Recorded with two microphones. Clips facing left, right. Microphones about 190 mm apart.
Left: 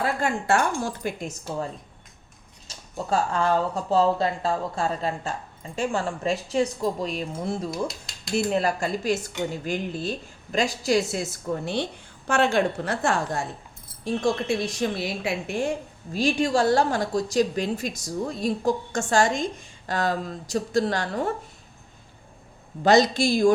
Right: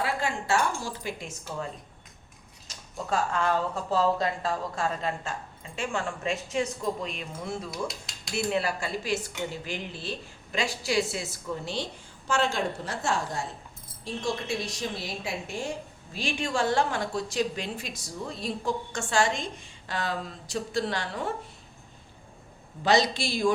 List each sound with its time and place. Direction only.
0.0 s speech: 50° left (ahead or behind)
2.6 s speech: 30° left (ahead or behind)
7.7 s speech: centre (ahead or behind)
8.4 s a woman's voice: 45° left (ahead or behind); by 15.7 s 60° left (ahead or behind)
16.1 s speech: 40° left (ahead or behind)
22.8 s speech: 45° left (ahead or behind)